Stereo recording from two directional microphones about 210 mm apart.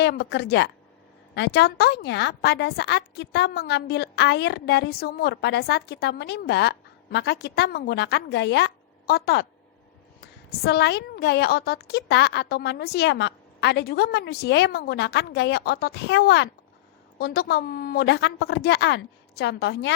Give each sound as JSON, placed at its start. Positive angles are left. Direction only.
{"t": 0.0, "sound": "a woman's voice", "side_deg": 50}